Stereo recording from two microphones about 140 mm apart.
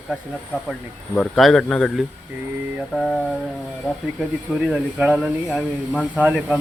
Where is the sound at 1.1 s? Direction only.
5° left (ahead or behind).